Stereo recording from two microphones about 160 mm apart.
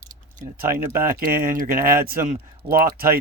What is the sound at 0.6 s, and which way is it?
Speech, 65° right (ahead or behind).